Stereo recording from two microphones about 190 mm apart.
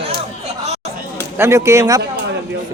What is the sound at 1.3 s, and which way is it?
Speech, 15° right (ahead or behind).